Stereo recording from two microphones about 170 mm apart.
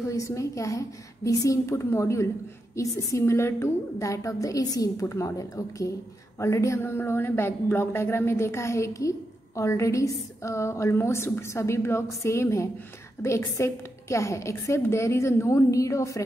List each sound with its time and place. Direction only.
0.1 s a woman's voice: 20° left (ahead or behind)
6.4 s a woman's voice: 15° left (ahead or behind)